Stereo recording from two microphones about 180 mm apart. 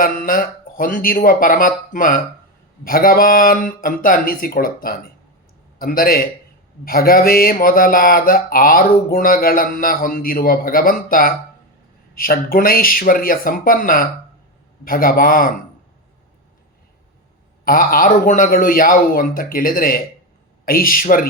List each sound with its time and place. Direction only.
0.0 s a man's voice: 50° left (ahead or behind)
17.7 s speech: 50° left (ahead or behind)